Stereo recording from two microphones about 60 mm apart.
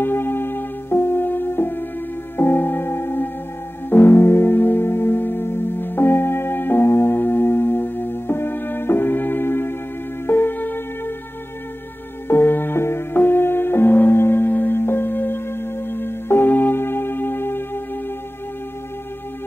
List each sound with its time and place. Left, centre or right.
0.0 s music: left
12.3 s music: left